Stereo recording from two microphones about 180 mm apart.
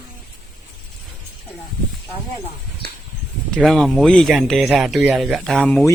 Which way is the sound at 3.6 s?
Centre (ahead or behind).